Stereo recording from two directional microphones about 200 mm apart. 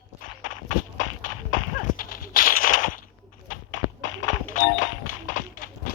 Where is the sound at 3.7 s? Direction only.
75° left (ahead or behind).